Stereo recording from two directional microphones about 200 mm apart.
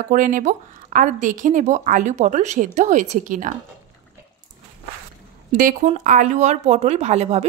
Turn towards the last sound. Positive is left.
turn(degrees=-35)  # may be behind; listen again after turning